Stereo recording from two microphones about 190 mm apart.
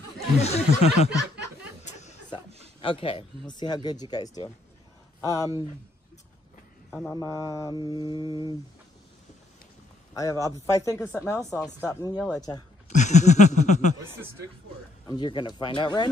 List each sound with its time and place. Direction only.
0.4 s snicker: 35° left (ahead or behind)
1.9 s a sound: 35° left (ahead or behind)
2.8 s speech: 25° left (ahead or behind)
7.1 s speech: 20° left (ahead or behind)
10.1 s speech: 20° left (ahead or behind)
11.3 s speech: 5° left (ahead or behind)
11.9 s speech: 15° left (ahead or behind)
12.9 s a sound: 40° left (ahead or behind)
15.0 s speech: 25° left (ahead or behind)